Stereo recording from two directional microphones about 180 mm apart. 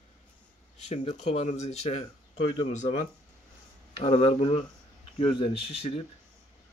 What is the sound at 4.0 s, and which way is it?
Speech, 35° left (ahead or behind).